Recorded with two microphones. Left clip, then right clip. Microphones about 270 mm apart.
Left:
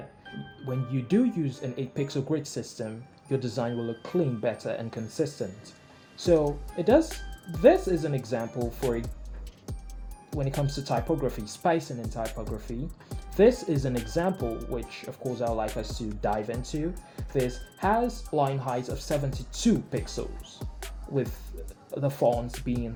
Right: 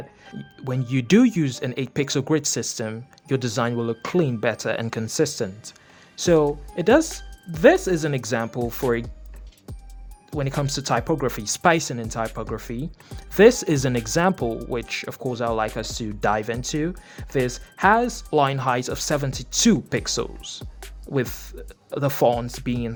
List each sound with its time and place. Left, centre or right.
0.7 s speech: right
6.7 s speech: right
10.6 s speech: right